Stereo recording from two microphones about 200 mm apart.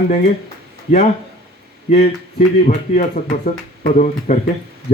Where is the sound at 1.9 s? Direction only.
30° left (ahead or behind).